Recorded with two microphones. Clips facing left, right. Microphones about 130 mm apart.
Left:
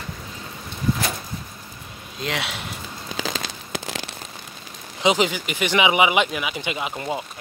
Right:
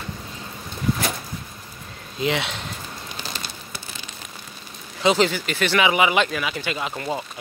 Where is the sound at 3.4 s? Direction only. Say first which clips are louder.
Left 6 dB; 90° left.